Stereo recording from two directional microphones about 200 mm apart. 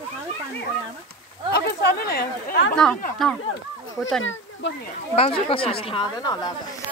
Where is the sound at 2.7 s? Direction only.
5° left (ahead or behind).